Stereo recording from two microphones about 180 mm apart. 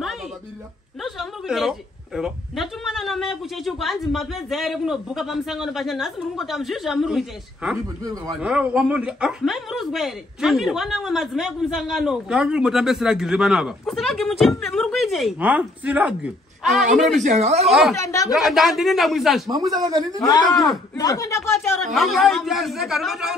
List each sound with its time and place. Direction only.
1.0 s speech: centre (ahead or behind)
8.0 s a man's voice: 20° right (ahead or behind)
8.4 s speech: 5° right (ahead or behind)
17.2 s a woman's voice: 40° right (ahead or behind)
17.6 s speech: centre (ahead or behind)
17.9 s speech: 15° left (ahead or behind)
18.3 s speech: centre (ahead or behind)
19.5 s a man's voice: 20° right (ahead or behind)
20.9 s speech: 20° left (ahead or behind)
21.9 s speech: centre (ahead or behind)